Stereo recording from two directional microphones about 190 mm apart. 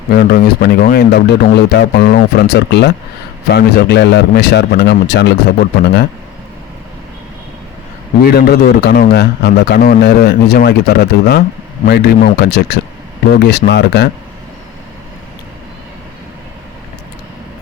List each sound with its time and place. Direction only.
0.1 s a man's voice: 50° left (ahead or behind)
8.2 s a man's voice: 55° left (ahead or behind)